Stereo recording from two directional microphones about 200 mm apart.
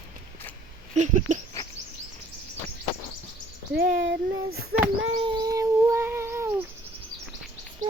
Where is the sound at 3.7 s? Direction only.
50° right (ahead or behind).